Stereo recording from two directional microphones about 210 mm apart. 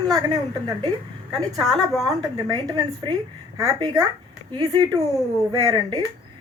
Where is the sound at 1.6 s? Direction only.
Centre (ahead or behind).